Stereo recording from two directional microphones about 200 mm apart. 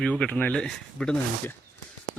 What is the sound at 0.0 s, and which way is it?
Speech, 5° left (ahead or behind).